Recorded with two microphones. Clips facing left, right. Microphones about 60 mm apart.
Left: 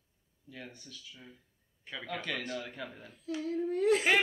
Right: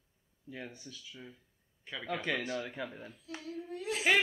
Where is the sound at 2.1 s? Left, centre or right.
Centre.